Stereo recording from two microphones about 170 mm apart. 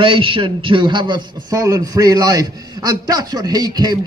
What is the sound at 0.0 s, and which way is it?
A man's voice, 30° right (ahead or behind).